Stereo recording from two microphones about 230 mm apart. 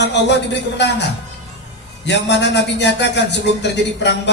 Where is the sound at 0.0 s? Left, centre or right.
Left.